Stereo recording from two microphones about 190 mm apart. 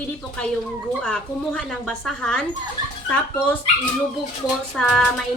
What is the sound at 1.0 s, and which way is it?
A woman's voice, 5° left (ahead or behind).